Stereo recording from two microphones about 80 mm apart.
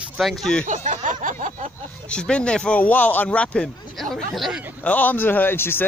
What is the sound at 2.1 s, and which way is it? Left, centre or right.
Speech, centre.